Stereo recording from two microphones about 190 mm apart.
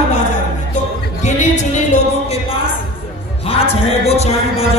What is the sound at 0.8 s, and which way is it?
Music, 40° left (ahead or behind).